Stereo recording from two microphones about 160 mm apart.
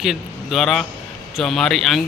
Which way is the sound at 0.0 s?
Centre (ahead or behind).